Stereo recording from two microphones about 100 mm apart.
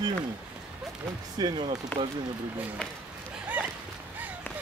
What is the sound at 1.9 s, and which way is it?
Speech, 20° left (ahead or behind).